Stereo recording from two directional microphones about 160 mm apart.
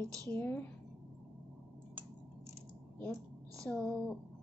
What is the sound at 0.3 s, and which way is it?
Speech, 10° left (ahead or behind).